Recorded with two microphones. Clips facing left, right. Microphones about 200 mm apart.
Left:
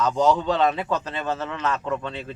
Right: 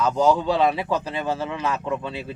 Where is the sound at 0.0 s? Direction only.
10° right (ahead or behind).